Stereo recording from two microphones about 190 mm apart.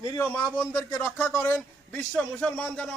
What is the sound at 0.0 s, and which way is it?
Speech, 20° left (ahead or behind).